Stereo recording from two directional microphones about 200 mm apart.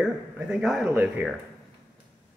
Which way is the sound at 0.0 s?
5° right (ahead or behind).